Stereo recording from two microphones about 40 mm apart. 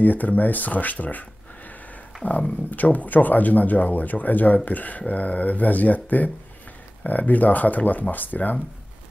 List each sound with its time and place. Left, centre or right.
0.0 s speech: left
2.2 s speech: left